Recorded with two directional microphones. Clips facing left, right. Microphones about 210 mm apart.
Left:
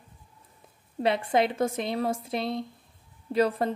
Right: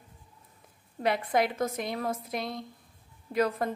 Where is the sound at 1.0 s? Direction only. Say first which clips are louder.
Left 3 dB; 25° left (ahead or behind).